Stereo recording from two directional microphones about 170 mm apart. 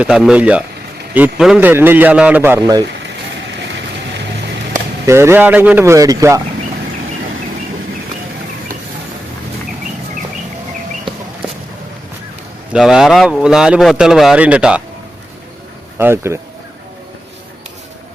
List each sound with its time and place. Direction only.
0.0 s a man's voice: 5° right (ahead or behind)
3.5 s vehicle: 90° right
5.0 s a man's voice: 15° right (ahead or behind)
12.7 s a man's voice: 5° right (ahead or behind)
16.0 s a man's voice: 15° right (ahead or behind)